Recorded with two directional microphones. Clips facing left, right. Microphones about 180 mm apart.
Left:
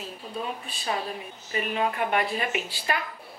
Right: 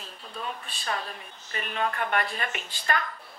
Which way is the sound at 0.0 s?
5° left (ahead or behind).